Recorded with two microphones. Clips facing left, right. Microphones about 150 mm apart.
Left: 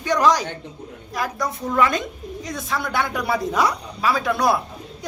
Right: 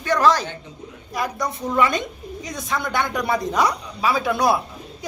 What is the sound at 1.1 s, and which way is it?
Speech, centre (ahead or behind).